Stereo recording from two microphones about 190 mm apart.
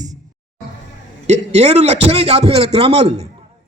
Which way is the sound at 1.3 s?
35° right (ahead or behind).